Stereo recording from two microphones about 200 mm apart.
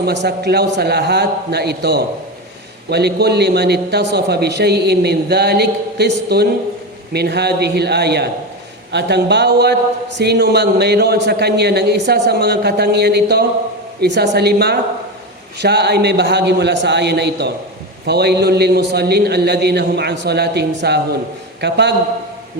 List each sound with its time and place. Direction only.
0.0 s a man's voice: 55° right (ahead or behind)